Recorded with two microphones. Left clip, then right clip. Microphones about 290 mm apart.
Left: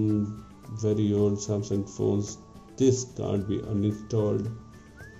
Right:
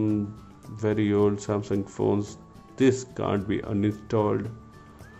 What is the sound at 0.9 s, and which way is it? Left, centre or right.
Speech, centre.